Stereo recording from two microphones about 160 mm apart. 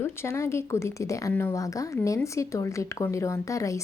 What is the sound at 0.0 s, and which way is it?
Speech, 15° left (ahead or behind).